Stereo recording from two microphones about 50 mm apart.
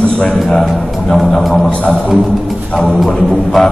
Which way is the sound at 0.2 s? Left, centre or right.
Centre.